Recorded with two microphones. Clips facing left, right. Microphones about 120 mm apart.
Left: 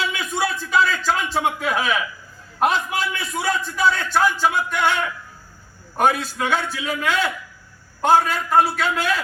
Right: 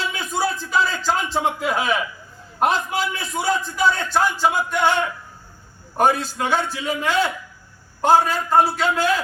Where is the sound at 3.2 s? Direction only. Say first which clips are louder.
Even; 30° right (ahead or behind).